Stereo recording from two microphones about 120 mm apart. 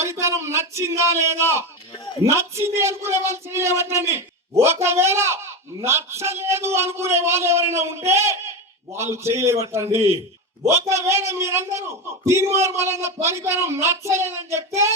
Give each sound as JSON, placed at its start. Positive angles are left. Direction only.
{"t": 0.0, "sound": "speech", "side_deg": -25}